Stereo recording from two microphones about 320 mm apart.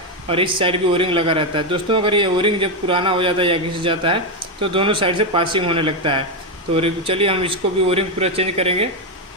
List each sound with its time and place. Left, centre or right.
0.3 s a man's voice: centre